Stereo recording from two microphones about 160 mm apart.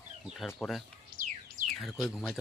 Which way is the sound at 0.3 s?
Centre (ahead or behind).